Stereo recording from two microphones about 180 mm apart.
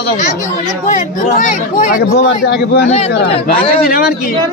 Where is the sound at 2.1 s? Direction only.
70° left (ahead or behind).